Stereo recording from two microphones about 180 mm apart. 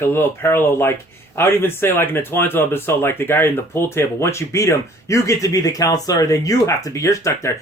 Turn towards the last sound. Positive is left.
turn(degrees=15)  # may be behind; listen again after turning